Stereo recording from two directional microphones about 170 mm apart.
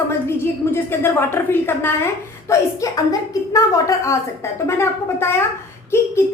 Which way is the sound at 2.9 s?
20° left (ahead or behind).